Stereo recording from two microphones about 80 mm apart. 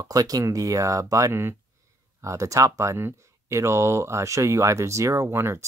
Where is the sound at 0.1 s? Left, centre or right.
Right.